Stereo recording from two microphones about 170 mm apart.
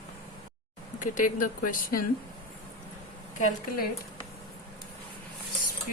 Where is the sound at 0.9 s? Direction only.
50° left (ahead or behind).